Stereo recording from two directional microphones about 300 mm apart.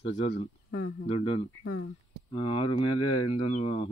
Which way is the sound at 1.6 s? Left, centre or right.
Left.